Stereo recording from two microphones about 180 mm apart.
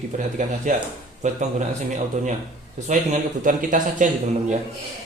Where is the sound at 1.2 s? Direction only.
40° right (ahead or behind).